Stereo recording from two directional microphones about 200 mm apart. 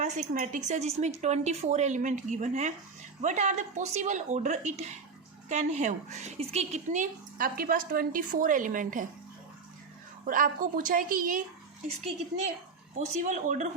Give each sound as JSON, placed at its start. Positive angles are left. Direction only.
{"t": 0.0, "sound": "speech", "side_deg": -35}
{"t": 10.2, "sound": "a woman's voice", "side_deg": -45}
{"t": 13.0, "sound": "speech", "side_deg": -35}